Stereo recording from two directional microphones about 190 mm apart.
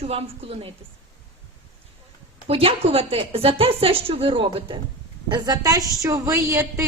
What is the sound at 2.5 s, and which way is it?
A woman's voice, 30° right (ahead or behind).